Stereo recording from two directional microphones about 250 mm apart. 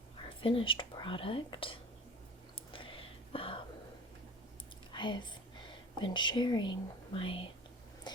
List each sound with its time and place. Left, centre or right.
0.3 s speech: left
2.7 s whispering: left
4.9 s speech: centre
8.1 s a sound: centre